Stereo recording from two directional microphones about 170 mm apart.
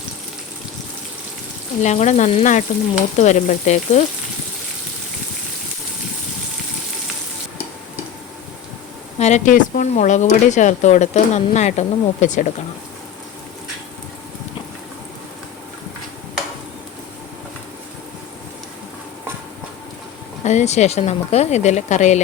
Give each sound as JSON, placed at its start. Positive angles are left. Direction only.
{"t": 1.8, "sound": "speech", "side_deg": 45}
{"t": 9.1, "sound": "speech", "side_deg": 40}
{"t": 20.4, "sound": "speech", "side_deg": 45}